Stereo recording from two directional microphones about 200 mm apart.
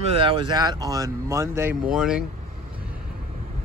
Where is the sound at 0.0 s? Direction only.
30° right (ahead or behind); by 2.2 s 5° right (ahead or behind).